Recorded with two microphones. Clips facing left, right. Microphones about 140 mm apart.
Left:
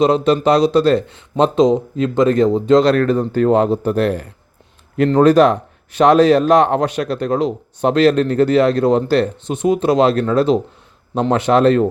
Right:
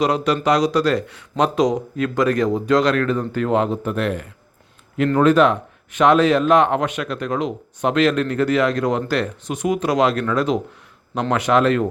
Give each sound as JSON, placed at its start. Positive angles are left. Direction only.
{"t": 0.0, "sound": "speech", "side_deg": 30}
{"t": 2.9, "sound": "speech", "side_deg": 40}